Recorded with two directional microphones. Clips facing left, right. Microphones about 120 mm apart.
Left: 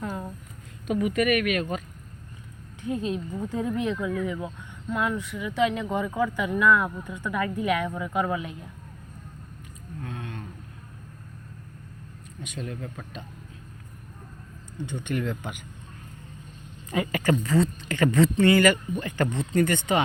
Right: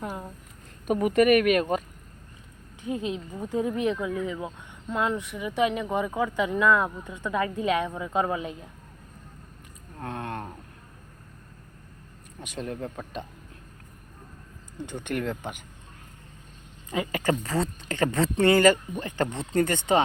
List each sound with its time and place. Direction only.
0.9 s speech: 40° right (ahead or behind)
2.8 s speech: 20° right (ahead or behind)
10.0 s speech: 55° right (ahead or behind)
12.5 s speech: 40° right (ahead or behind)
14.8 s speech: 45° right (ahead or behind)
17.1 s speech: 35° right (ahead or behind)